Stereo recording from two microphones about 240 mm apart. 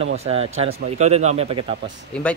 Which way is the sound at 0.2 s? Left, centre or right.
Right.